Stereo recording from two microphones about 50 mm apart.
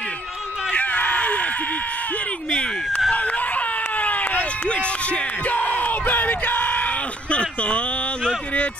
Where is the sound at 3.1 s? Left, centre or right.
Left.